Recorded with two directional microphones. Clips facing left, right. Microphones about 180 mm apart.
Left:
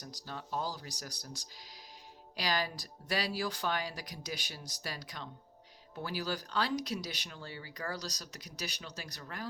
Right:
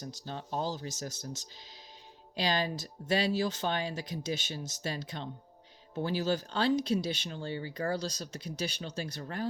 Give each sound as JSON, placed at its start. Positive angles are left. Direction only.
{"t": 0.0, "sound": "speech", "side_deg": -25}